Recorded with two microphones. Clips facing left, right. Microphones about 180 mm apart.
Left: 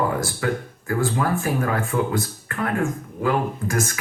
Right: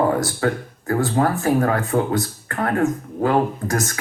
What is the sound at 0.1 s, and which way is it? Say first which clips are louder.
Speech: right 4 dB; 40° right (ahead or behind).